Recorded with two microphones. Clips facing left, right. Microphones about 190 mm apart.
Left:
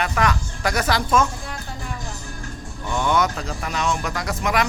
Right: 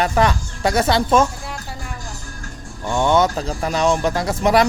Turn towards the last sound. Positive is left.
turn(degrees=-35)  # may be behind; listen again after turning